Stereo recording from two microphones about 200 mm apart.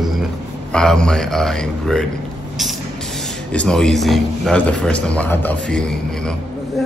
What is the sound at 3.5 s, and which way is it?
Speech, 5° left (ahead or behind).